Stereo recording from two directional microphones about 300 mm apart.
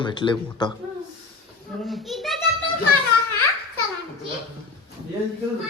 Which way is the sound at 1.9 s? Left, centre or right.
Centre.